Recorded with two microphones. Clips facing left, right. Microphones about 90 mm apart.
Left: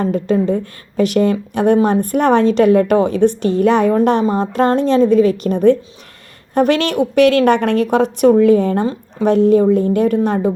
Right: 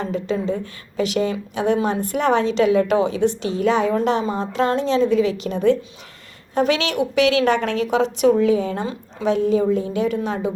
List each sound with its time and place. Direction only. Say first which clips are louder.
0.0 s a woman's voice: left 7 dB; 50° left (ahead or behind)